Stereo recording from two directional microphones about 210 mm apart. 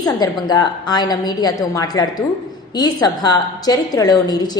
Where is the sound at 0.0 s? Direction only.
20° left (ahead or behind).